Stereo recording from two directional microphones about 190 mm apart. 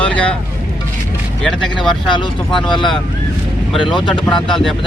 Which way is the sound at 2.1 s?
25° left (ahead or behind).